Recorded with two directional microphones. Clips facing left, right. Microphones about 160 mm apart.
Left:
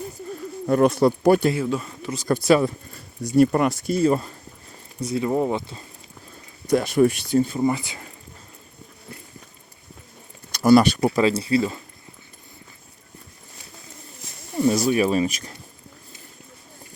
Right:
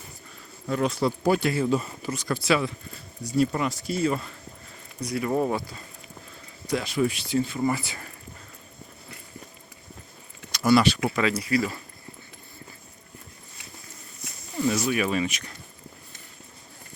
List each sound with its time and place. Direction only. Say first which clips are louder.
0.7 s speech: left 8 dB; 55° left (ahead or behind)
1.6 s speech: right 1 dB; 5° right (ahead or behind)
2.2 s speech: left 7 dB; 45° left (ahead or behind)
5.0 s speech: left 3 dB; 25° left (ahead or behind)
6.7 s speech: left 7 dB; 50° left (ahead or behind)
7.6 s speech: left 4 dB; 20° left (ahead or behind)
10.6 s speech: left 5 dB; 45° left (ahead or behind); by 11.8 s 25° left (ahead or behind)
14.5 s speech: left 5 dB; 30° left (ahead or behind)